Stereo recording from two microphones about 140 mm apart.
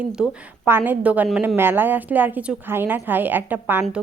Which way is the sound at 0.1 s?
5° right (ahead or behind).